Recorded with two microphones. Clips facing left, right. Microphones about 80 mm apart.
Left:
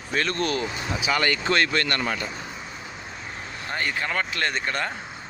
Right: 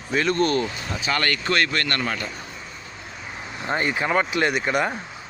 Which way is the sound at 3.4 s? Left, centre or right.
Right.